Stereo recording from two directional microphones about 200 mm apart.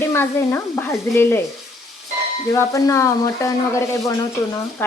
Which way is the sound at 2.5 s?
15° left (ahead or behind).